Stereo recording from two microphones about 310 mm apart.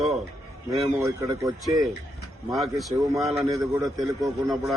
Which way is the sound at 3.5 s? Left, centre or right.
Centre.